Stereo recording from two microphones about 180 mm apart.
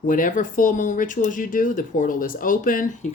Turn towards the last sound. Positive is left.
turn(degrees=50)  # may be behind; listen again after turning